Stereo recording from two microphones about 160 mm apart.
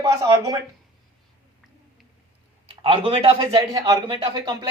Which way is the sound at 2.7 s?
35° right (ahead or behind).